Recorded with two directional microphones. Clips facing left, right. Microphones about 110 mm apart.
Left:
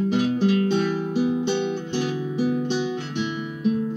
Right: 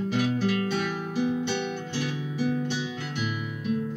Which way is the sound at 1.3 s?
15° left (ahead or behind).